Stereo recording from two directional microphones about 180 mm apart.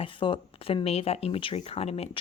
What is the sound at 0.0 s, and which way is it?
Speech, 30° left (ahead or behind).